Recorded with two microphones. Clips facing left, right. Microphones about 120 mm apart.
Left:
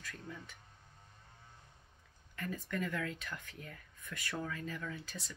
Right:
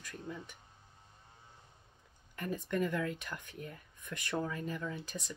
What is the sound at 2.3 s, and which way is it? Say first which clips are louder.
Speech: right 4 dB; 20° right (ahead or behind).